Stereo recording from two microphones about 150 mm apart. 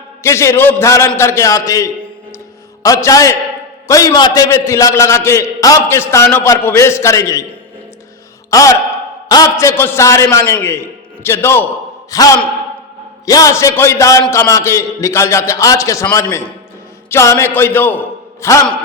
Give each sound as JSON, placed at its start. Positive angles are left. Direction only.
{"t": 0.2, "sound": "a man's voice", "side_deg": 20}
{"t": 8.4, "sound": "a man's voice", "side_deg": 20}